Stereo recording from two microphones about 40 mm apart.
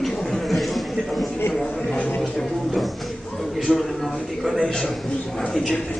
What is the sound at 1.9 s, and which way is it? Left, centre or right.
Speech, left.